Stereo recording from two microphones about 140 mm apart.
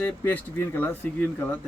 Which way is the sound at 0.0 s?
10° left (ahead or behind).